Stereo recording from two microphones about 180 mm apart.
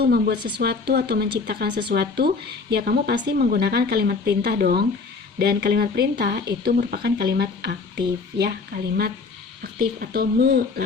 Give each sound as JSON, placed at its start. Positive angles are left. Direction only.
{"t": 0.0, "sound": "speech", "side_deg": -60}
{"t": 9.7, "sound": "speech", "side_deg": -55}